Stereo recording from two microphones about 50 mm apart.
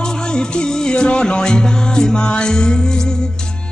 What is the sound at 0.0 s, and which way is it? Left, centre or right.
Music, centre.